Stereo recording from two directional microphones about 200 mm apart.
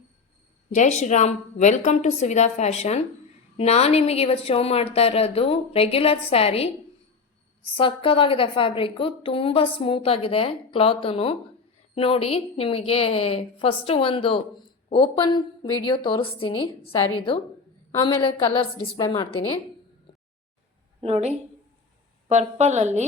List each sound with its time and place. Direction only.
0.7 s a woman's voice: 35° left (ahead or behind)
7.8 s a woman's voice: 25° left (ahead or behind)
20.1 s a sound: 25° left (ahead or behind)
21.0 s a woman's voice: 30° right (ahead or behind)